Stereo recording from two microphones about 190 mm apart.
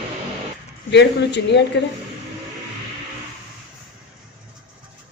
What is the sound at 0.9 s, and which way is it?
Speech, 65° left (ahead or behind).